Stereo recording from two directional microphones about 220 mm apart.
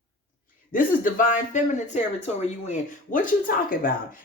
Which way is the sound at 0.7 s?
40° left (ahead or behind).